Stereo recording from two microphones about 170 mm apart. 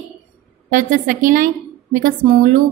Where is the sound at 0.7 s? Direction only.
50° right (ahead or behind).